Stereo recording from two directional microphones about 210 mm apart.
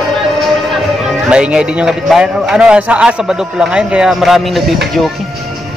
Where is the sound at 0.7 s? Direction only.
5° right (ahead or behind).